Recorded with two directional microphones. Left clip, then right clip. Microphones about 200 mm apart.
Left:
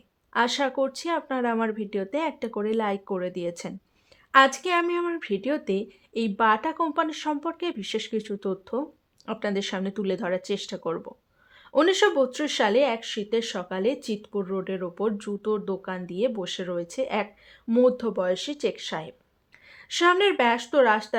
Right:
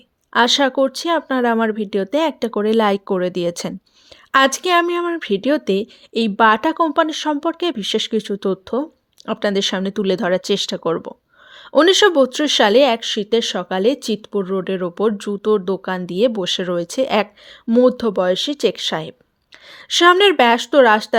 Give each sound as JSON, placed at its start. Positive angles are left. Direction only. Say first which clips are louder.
{"t": 0.3, "sound": "speech", "louder": "right 9 dB", "side_deg": -40}